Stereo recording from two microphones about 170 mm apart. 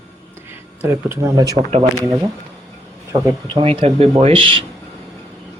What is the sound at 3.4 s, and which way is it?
Speech, 30° right (ahead or behind).